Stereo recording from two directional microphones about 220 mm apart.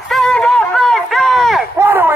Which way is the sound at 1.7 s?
10° right (ahead or behind).